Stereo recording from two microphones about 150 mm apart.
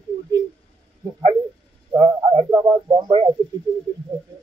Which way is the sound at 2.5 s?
25° right (ahead or behind).